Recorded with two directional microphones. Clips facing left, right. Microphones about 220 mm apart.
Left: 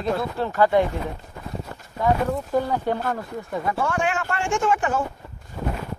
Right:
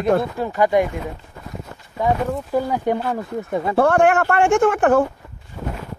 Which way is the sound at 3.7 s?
60° right (ahead or behind).